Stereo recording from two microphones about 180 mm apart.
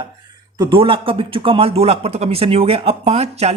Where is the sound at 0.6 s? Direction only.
30° right (ahead or behind).